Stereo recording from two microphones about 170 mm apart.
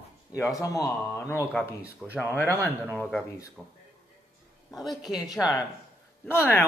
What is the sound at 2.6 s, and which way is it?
Speech, 5° left (ahead or behind).